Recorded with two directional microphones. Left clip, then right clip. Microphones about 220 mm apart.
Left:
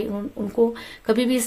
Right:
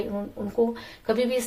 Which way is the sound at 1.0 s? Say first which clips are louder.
Left 3 dB; 40° left (ahead or behind).